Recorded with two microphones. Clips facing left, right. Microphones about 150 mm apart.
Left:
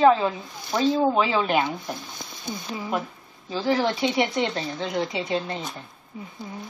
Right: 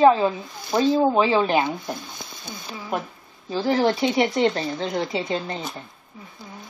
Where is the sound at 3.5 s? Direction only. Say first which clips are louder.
Right 3 dB; 5° right (ahead or behind).